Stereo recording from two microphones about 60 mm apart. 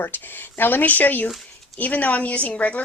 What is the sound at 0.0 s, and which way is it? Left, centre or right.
Speech, left.